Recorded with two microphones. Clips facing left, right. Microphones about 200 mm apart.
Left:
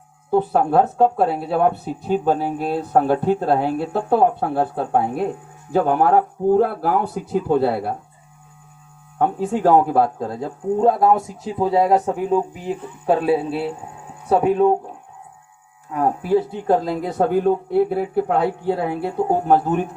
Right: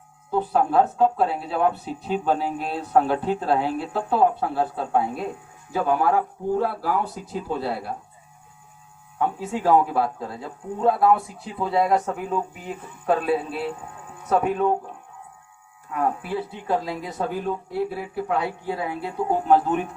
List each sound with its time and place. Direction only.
0.5 s speech: 50° left (ahead or behind)
9.1 s speech: 50° left (ahead or behind); by 14.8 s 25° left (ahead or behind)
15.9 s speech: 35° left (ahead or behind)